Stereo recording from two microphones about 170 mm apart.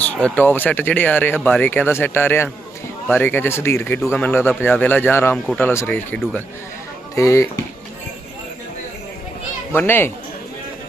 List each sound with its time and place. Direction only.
0.0 s speech: 5° left (ahead or behind)
7.2 s speech: 15° left (ahead or behind)
9.7 s speech: 10° left (ahead or behind)